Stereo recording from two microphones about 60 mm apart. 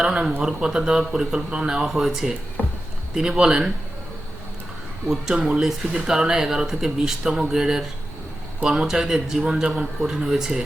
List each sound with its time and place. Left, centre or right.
0.0 s speech: centre
2.6 s a sound: left
3.2 s speech: centre
5.0 s speech: centre